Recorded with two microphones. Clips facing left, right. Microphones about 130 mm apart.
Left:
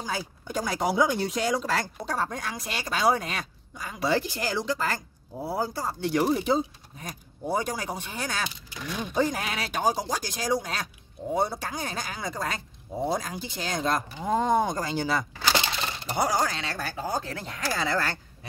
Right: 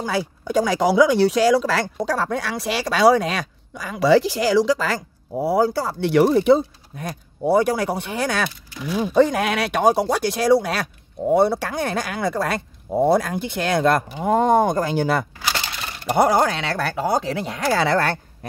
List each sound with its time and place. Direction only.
0.0 s speech: 75° right (ahead or behind)